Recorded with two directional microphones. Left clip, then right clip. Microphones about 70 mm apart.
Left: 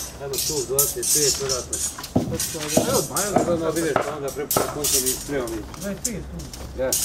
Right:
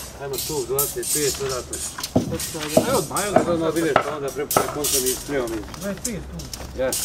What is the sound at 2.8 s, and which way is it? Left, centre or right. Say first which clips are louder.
Speech: right 1 dB; right.